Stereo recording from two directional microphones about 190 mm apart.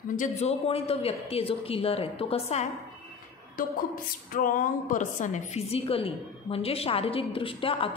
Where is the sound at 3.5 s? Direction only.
50° left (ahead or behind).